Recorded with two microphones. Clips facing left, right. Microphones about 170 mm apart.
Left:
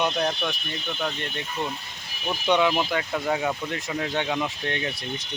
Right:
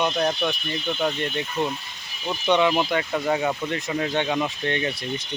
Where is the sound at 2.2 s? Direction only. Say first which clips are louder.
Right 1 dB; 10° left (ahead or behind).